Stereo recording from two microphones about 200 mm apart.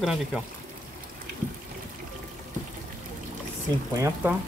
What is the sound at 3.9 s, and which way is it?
Speech, 10° right (ahead or behind).